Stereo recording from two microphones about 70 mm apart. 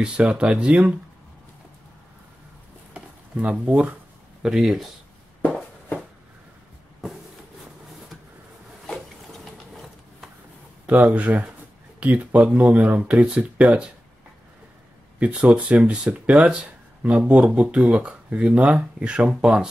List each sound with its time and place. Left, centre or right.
0.0 s speech: centre
2.9 s a sound: centre
4.4 s speech: centre
5.4 s a sound: centre
8.8 s wood: centre
10.9 s speech: right
15.1 s speech: right